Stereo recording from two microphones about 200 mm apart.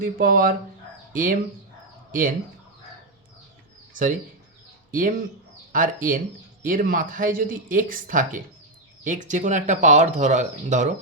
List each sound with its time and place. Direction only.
0.0 s speech: 45° right (ahead or behind)
3.9 s speech: 40° right (ahead or behind)